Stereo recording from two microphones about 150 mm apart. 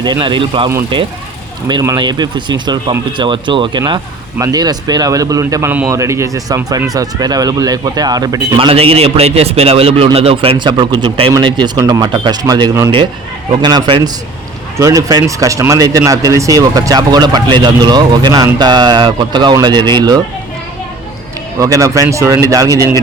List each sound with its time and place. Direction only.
0.0 s a man's voice: 30° right (ahead or behind)
1.6 s speech: 25° right (ahead or behind)
8.5 s a man's voice: 40° right (ahead or behind)
21.6 s speech: 20° right (ahead or behind)